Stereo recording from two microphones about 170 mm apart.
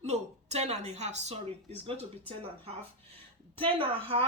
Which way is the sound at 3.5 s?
30° right (ahead or behind).